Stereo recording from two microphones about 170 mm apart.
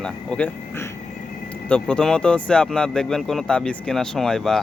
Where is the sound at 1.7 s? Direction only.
5° left (ahead or behind).